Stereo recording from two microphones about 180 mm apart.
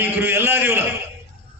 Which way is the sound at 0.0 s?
15° right (ahead or behind).